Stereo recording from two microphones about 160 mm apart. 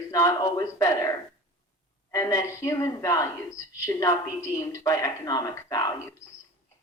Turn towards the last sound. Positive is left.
turn(degrees=20)  # may be behind; listen again after turning